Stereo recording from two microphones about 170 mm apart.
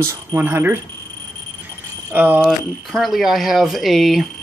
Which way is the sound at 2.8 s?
Centre (ahead or behind).